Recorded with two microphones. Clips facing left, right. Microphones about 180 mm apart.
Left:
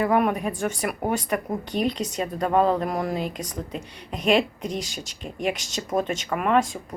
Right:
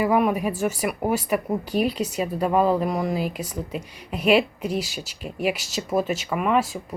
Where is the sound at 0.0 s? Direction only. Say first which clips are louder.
Right 1 dB; 5° right (ahead or behind).